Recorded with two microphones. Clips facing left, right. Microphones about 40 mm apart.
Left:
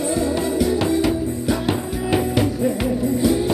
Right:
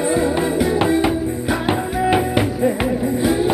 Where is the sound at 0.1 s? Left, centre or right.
Right.